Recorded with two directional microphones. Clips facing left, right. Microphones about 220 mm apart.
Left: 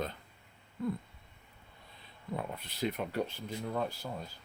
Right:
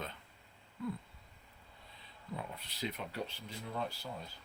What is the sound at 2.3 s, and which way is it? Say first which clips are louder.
Speech: left 6 dB; 55° left (ahead or behind).